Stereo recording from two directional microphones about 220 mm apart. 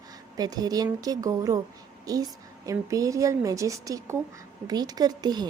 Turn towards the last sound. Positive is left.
turn(degrees=-20)  # may be behind; listen again after turning